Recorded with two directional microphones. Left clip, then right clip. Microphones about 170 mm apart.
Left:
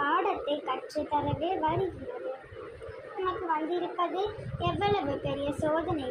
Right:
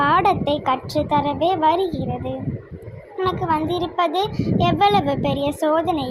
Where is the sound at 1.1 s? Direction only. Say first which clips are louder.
Right 11 dB; 45° right (ahead or behind).